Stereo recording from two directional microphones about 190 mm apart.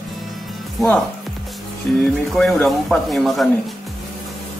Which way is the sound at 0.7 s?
Centre (ahead or behind).